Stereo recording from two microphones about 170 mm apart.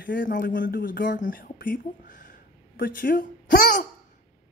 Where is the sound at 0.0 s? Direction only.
55° left (ahead or behind).